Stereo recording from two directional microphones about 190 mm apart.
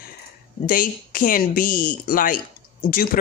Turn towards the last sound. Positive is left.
turn(degrees=50)  # may be behind; listen again after turning